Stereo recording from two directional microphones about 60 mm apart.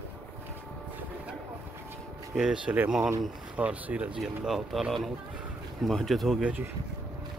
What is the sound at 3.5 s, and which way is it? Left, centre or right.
Speech, right.